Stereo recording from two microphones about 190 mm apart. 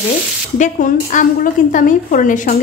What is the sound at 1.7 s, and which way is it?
Speech, 45° left (ahead or behind).